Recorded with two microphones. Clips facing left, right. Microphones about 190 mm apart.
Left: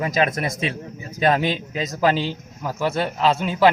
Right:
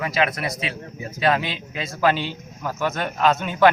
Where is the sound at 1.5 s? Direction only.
40° left (ahead or behind).